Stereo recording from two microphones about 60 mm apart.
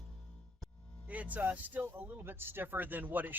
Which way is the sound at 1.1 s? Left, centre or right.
Right.